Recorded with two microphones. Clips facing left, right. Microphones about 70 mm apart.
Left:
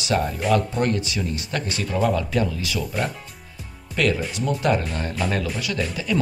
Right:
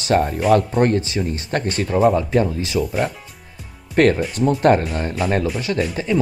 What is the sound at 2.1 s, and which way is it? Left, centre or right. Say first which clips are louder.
Speech: right 5 dB; right.